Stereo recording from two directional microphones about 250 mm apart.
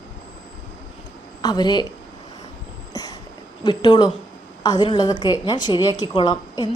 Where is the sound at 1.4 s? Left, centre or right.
Centre.